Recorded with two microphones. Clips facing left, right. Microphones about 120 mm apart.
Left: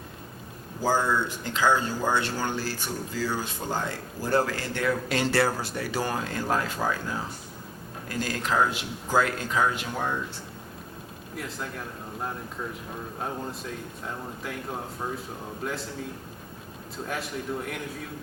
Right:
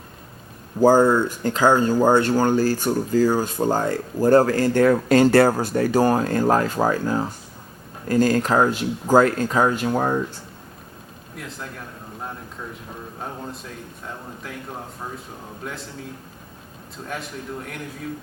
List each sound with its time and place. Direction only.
0.8 s speech: 45° right (ahead or behind)
11.3 s speech: centre (ahead or behind)
15.6 s speech: centre (ahead or behind)
17.1 s speech: centre (ahead or behind)